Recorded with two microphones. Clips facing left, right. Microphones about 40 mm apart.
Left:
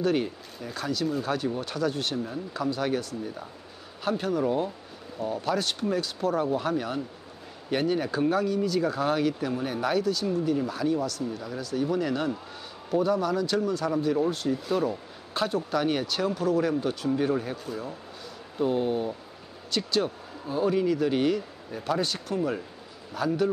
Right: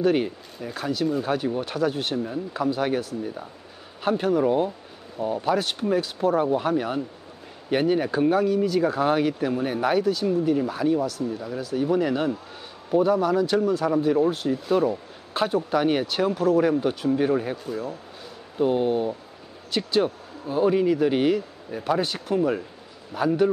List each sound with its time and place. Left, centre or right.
0.0 s speech: centre
17.6 s speech: centre
18.6 s a man's voice: centre